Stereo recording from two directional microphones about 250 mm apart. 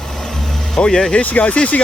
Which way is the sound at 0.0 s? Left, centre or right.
Centre.